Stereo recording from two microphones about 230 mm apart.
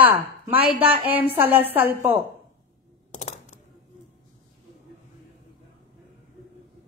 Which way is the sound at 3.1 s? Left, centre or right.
Left.